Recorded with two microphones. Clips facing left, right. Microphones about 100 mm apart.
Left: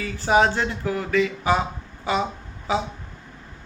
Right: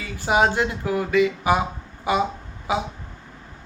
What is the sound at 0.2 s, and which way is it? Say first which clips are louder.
Speech: even; 15° right (ahead or behind).